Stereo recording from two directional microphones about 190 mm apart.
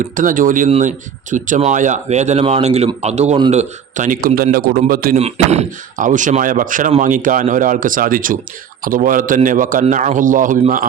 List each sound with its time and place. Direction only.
0.0 s speech: 45° right (ahead or behind)
5.1 s speech: 35° right (ahead or behind)